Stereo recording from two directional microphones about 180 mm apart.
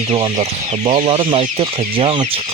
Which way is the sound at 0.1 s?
30° right (ahead or behind).